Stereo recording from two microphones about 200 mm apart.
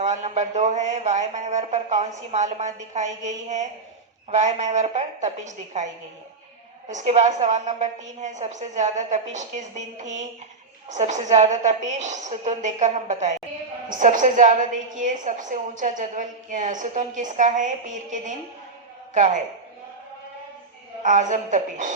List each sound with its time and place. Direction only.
0.0 s a woman's voice: 35° right (ahead or behind)
21.0 s a woman's voice: 40° right (ahead or behind)